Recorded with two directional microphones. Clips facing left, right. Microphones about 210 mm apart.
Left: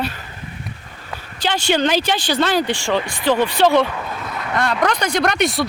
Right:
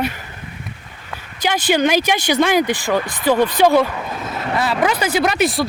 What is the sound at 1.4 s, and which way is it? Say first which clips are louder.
Speech: right 2 dB; 10° right (ahead or behind).